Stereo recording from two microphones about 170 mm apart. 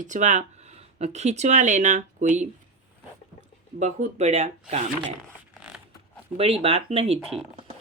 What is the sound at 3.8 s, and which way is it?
Speech, 40° right (ahead or behind).